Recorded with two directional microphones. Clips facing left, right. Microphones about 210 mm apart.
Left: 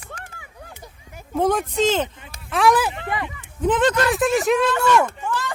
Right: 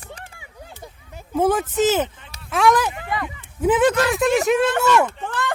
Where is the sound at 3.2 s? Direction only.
10° right (ahead or behind).